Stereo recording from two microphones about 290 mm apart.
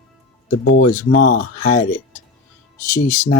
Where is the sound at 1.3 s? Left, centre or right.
Left.